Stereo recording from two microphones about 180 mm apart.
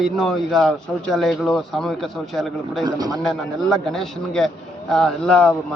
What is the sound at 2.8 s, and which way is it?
Speech, 20° right (ahead or behind).